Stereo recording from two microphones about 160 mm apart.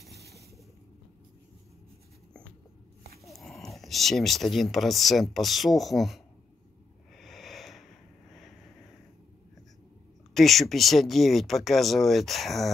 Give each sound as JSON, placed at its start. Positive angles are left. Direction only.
{"t": 3.3, "sound": "speech", "side_deg": 0}
{"t": 7.2, "sound": "wheeze", "side_deg": 0}
{"t": 8.3, "sound": "vehicle", "side_deg": 0}
{"t": 10.3, "sound": "speech", "side_deg": 0}